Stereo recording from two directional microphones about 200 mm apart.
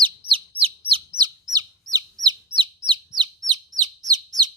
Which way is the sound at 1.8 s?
20° right (ahead or behind).